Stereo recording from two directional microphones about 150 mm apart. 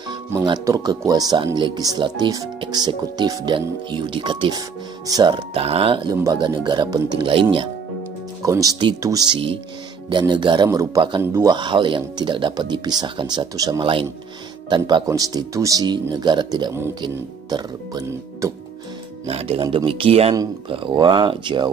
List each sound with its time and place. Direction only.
0.1 s speech: 25° right (ahead or behind)
19.2 s speech: 40° right (ahead or behind)